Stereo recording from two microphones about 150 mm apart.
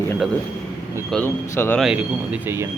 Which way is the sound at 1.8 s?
5° right (ahead or behind).